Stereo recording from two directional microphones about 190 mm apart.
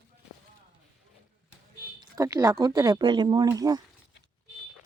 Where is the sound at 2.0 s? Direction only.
20° right (ahead or behind).